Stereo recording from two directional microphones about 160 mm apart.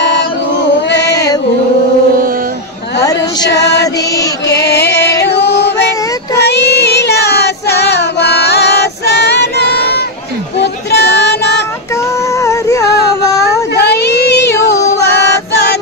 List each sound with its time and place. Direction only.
3.0 s a sound: 20° left (ahead or behind)
3.4 s music: 90° left
3.8 s mantra: 20° left (ahead or behind)
4.6 s music: 90° left
6.3 s child singing: 90° left
10.6 s music: 90° left
12.4 s music: 20° left (ahead or behind)
13.7 s child singing: 90° left
15.0 s music: 90° left